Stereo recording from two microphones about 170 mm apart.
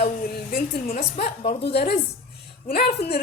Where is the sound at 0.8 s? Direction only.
35° left (ahead or behind).